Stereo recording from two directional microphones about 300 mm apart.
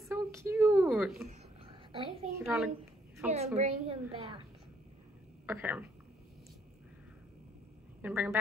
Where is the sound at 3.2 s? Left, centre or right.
Centre.